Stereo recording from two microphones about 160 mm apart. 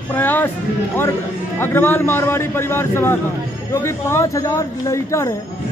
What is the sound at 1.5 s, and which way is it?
A man's voice, 15° left (ahead or behind).